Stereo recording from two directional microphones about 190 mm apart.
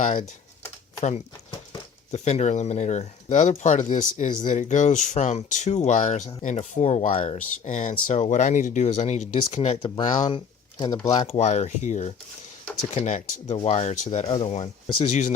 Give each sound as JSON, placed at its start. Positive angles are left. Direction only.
{"t": 1.0, "sound": "speech", "side_deg": 35}
{"t": 9.6, "sound": "speech", "side_deg": 25}
{"t": 11.3, "sound": "speech", "side_deg": 35}